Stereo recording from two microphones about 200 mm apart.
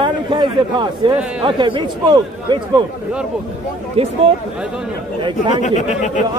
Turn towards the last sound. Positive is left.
turn(degrees=35)  # may be behind; listen again after turning